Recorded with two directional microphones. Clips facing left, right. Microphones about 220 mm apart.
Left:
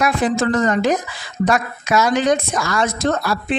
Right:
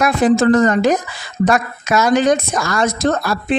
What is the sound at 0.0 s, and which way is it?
A woman's voice, 40° right (ahead or behind).